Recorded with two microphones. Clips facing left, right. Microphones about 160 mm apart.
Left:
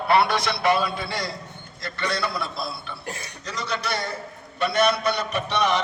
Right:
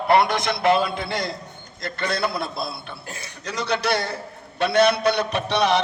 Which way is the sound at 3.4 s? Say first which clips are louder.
Right 6 dB; 70° right (ahead or behind).